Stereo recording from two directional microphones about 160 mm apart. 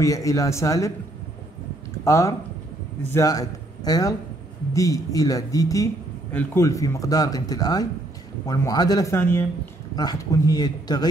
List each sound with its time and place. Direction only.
0.0 s speech: 20° left (ahead or behind)
2.0 s a man's voice: 20° left (ahead or behind)